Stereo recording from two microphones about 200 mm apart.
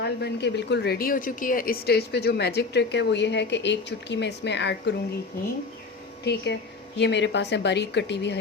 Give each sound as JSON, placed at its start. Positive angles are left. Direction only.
{"t": 0.0, "sound": "a woman's voice", "side_deg": 55}
{"t": 6.2, "sound": "a woman's voice", "side_deg": 55}